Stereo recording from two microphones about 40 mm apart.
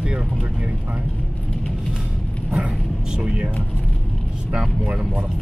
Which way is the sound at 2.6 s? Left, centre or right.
Right.